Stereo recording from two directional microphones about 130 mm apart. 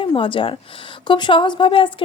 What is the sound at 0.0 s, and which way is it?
Speech, 40° left (ahead or behind).